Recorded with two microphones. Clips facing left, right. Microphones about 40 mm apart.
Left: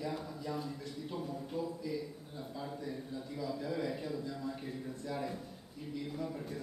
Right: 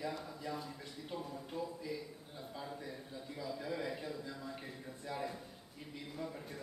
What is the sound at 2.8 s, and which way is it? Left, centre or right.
A man's voice, centre.